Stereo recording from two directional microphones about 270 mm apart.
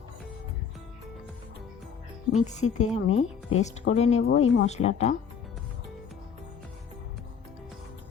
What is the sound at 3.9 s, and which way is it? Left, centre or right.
A woman's voice, left.